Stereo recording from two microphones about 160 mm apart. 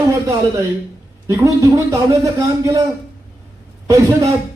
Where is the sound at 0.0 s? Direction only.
20° right (ahead or behind).